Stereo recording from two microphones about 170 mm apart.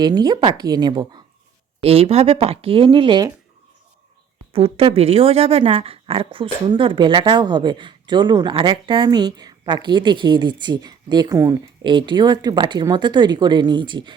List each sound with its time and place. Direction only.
0.0 s a woman's voice: 25° right (ahead or behind)
1.8 s speech: 35° right (ahead or behind)
4.5 s a woman's voice: 35° right (ahead or behind)